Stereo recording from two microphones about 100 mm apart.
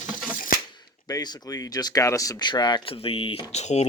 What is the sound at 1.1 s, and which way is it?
Speech, 40° left (ahead or behind).